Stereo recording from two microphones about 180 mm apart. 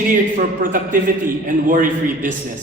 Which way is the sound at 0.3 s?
50° right (ahead or behind).